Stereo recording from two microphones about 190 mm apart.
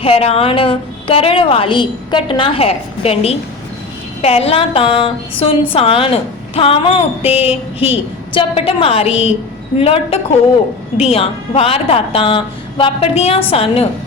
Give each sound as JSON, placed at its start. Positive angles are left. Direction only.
{"t": 0.0, "sound": "a woman's voice", "side_deg": 30}